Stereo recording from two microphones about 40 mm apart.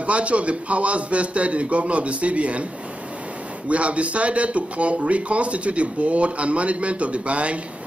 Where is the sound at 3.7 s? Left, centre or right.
Right.